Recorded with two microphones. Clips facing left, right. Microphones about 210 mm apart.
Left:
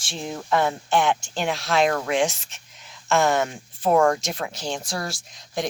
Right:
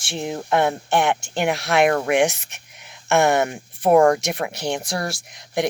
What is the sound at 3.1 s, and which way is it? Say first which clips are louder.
Speech: right 3 dB; 65° right (ahead or behind).